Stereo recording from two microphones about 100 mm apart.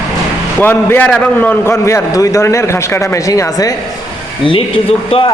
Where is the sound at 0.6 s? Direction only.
20° left (ahead or behind).